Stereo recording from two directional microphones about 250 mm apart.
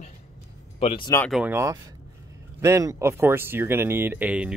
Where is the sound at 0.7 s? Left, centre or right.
Centre.